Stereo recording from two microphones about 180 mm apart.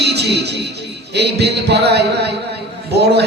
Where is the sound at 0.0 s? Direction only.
65° right (ahead or behind).